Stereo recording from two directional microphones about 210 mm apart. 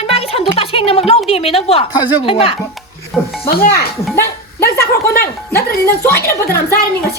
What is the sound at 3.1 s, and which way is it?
Speech, centre (ahead or behind).